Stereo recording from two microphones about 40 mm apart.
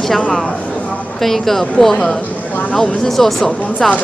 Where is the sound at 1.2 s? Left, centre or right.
Centre.